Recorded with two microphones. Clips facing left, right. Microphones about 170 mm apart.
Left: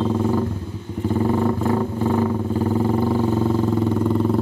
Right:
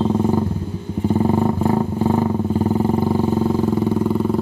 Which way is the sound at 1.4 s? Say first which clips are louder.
Right 2 dB; 25° right (ahead or behind).